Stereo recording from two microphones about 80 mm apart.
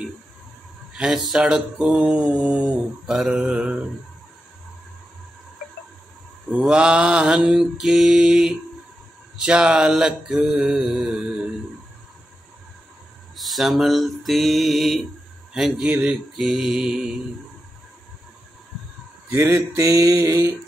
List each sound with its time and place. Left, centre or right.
0.9 s mantra: centre
6.6 s mantra: centre
13.4 s mantra: centre
19.3 s mantra: right